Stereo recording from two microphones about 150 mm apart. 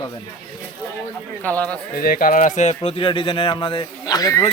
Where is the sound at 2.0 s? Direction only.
80° left; by 4.5 s 25° left (ahead or behind).